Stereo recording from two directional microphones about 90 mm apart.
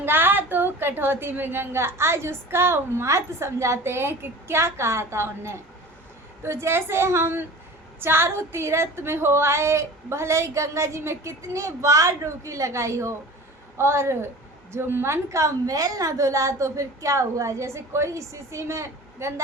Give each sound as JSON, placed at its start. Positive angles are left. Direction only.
{"t": 0.0, "sound": "a woman's voice", "side_deg": -25}